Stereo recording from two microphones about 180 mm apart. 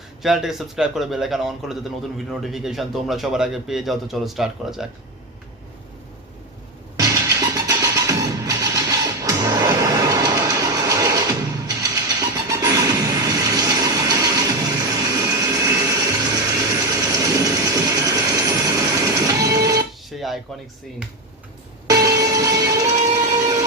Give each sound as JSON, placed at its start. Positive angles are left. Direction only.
{"t": 0.2, "sound": "speech", "side_deg": 0}
{"t": 7.0, "sound": "music", "side_deg": -20}
{"t": 20.1, "sound": "dishes", "side_deg": 0}
{"t": 21.8, "sound": "music", "side_deg": -20}